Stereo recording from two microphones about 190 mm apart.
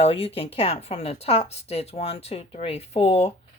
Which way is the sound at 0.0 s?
30° left (ahead or behind).